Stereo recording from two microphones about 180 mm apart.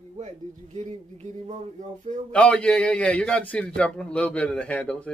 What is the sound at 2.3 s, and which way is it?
A man's voice, 5° left (ahead or behind).